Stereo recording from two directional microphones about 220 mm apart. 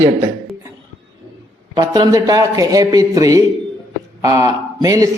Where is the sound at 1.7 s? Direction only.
15° right (ahead or behind).